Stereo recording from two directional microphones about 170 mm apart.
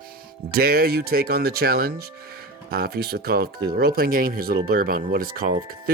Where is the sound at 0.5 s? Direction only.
60° right (ahead or behind).